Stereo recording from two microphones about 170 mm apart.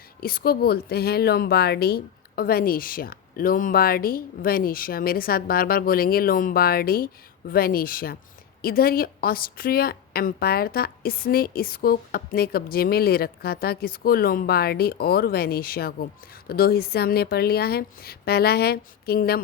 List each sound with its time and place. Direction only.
0.2 s a woman's voice: 60° left (ahead or behind)